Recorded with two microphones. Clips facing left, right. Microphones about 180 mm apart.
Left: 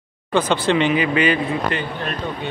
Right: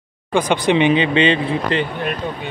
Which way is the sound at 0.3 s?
15° right (ahead or behind).